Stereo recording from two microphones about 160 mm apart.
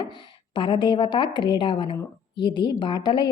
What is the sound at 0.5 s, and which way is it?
A woman's voice, 30° left (ahead or behind).